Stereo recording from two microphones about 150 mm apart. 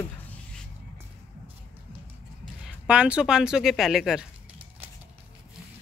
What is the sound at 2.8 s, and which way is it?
Speech, 10° right (ahead or behind).